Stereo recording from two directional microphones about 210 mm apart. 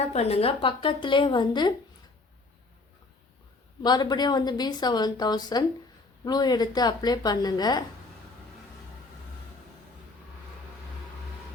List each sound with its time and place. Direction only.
0.0 s a woman's voice: 30° left (ahead or behind)
3.8 s a woman's voice: 20° left (ahead or behind)